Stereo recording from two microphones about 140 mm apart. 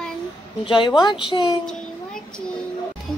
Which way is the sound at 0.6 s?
40° left (ahead or behind).